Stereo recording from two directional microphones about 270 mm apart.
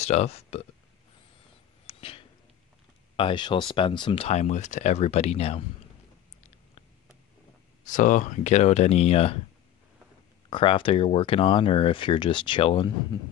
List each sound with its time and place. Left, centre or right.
0.0 s speech: left
1.9 s a sound: left
3.2 s speech: centre
7.8 s speech: left
10.5 s speech: centre